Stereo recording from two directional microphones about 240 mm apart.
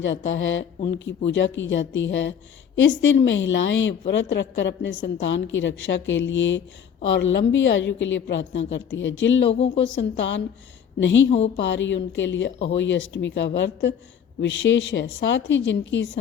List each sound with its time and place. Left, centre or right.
0.3 s a woman's voice: left
11.3 s a woman's voice: left
11.7 s a woman's voice: left